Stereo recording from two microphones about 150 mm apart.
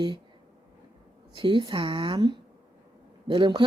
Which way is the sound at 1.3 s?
35° right (ahead or behind).